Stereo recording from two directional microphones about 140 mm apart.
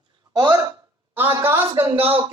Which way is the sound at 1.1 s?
15° right (ahead or behind).